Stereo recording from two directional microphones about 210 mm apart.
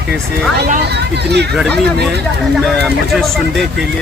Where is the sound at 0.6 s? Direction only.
50° right (ahead or behind).